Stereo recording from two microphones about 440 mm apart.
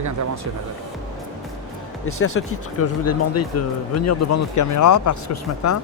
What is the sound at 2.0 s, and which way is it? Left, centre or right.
Speech, left.